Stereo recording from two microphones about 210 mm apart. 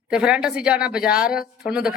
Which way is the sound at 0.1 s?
5° right (ahead or behind).